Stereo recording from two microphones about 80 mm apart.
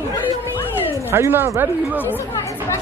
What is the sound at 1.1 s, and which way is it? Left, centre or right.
Speech, right.